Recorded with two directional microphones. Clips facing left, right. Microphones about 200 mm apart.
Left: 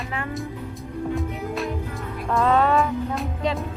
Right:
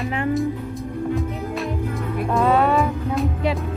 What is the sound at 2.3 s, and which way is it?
Music, 15° right (ahead or behind).